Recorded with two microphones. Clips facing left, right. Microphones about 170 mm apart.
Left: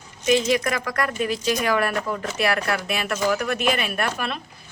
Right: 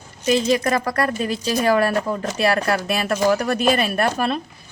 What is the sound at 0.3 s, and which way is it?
A woman's voice, 35° right (ahead or behind).